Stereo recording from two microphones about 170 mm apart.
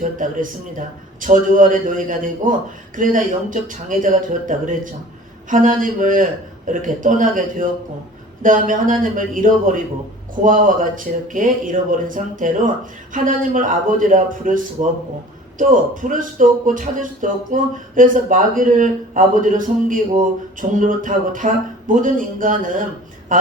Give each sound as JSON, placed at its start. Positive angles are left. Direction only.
{"t": 1.2, "sound": "speech", "side_deg": -50}